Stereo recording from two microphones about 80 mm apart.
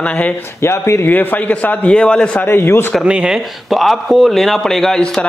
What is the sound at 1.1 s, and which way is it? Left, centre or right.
Speech, left.